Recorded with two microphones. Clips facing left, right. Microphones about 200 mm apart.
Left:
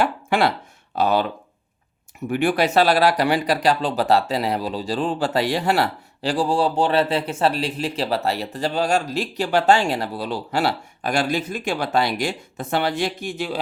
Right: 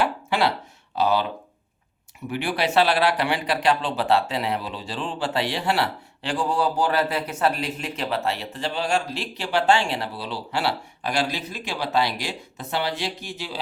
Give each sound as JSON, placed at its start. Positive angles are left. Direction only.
{"t": 0.0, "sound": "speech", "side_deg": 50}
{"t": 2.3, "sound": "speech", "side_deg": 45}